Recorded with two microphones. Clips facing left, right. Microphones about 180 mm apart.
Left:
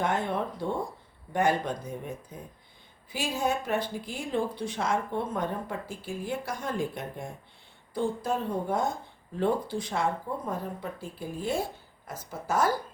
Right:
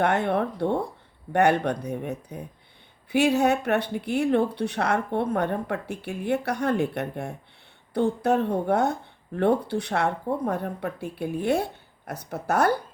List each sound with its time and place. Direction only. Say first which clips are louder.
0.0 s speech: right 6 dB; 65° right (ahead or behind)